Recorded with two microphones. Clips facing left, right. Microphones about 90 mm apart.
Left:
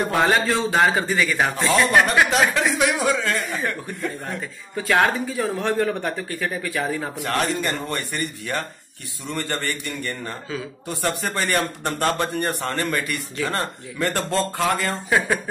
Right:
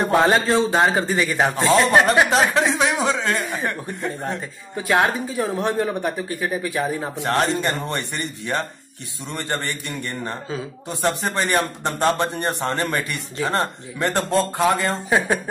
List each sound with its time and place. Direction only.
0.1 s a man's voice: 25° right (ahead or behind)